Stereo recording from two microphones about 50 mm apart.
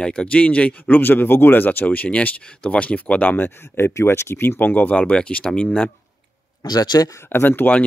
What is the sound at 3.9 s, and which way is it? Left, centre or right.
Speech, left.